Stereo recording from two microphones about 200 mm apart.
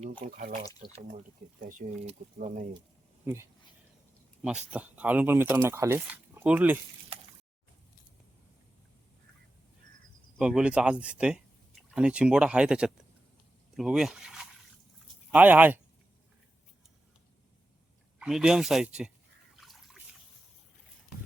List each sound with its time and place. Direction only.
0.0 s speech: 25° right (ahead or behind)
0.3 s speech: 45° right (ahead or behind)
3.3 s speech: 10° right (ahead or behind)
4.4 s speech: 5° right (ahead or behind)
10.3 s speech: 5° right (ahead or behind)
18.2 s speech: 5° right (ahead or behind)
19.5 s water: centre (ahead or behind)